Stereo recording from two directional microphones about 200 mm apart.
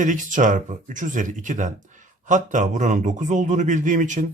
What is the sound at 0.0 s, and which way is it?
Speech, 40° right (ahead or behind).